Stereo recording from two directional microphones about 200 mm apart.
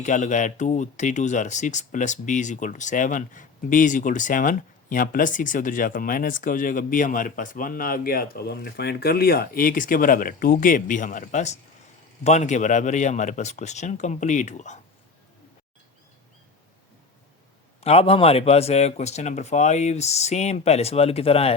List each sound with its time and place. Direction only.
0.0 s speech: 40° left (ahead or behind)
17.7 s speech: 30° left (ahead or behind)